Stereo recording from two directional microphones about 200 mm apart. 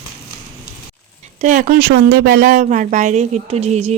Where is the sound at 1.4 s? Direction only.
40° right (ahead or behind).